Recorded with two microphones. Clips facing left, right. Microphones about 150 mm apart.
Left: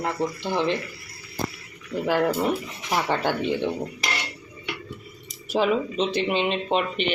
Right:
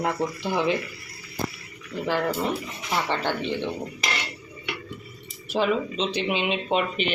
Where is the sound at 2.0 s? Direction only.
10° left (ahead or behind).